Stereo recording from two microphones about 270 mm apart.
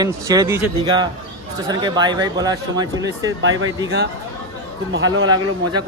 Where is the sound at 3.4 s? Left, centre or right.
Right.